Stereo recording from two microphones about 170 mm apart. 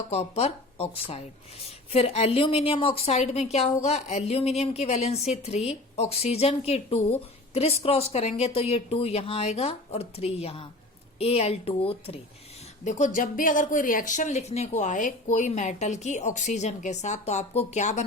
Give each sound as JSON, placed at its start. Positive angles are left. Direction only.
{"t": 0.1, "sound": "speech", "side_deg": 35}
{"t": 12.8, "sound": "speech", "side_deg": 45}